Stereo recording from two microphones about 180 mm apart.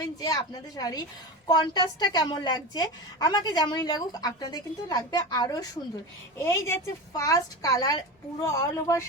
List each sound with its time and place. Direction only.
0.2 s a woman's voice: 20° left (ahead or behind)